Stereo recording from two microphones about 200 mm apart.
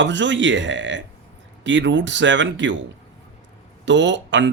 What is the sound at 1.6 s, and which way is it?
Speech, 65° right (ahead or behind).